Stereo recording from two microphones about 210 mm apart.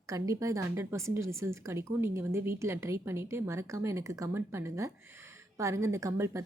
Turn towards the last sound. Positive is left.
turn(degrees=-15)  # may be behind; listen again after turning